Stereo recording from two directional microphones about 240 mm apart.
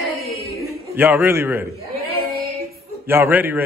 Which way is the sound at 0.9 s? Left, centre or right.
Centre.